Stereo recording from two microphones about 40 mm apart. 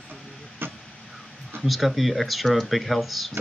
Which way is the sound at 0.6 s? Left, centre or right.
Right.